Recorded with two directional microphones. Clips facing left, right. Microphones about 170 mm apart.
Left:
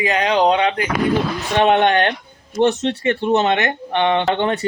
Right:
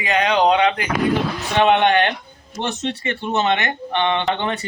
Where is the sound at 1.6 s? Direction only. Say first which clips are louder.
Left 1 dB; 45° left (ahead or behind).